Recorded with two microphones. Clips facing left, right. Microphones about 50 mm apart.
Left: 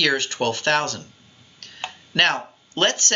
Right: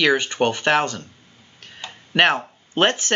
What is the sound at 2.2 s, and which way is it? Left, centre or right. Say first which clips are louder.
Speech: right 3 dB; centre.